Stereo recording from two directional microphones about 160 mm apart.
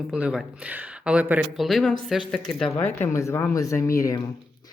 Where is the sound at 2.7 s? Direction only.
15° left (ahead or behind).